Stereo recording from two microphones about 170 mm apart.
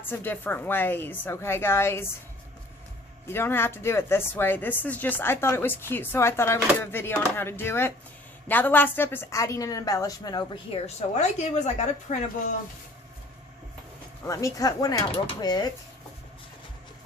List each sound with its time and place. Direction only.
0.0 s speech: 10° left (ahead or behind)
3.2 s a woman's voice: 15° left (ahead or behind); by 12.2 s 45° left (ahead or behind)
14.3 s a woman's voice: 20° left (ahead or behind)